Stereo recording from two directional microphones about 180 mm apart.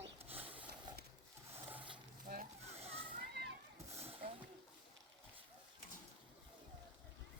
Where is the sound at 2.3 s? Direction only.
55° right (ahead or behind).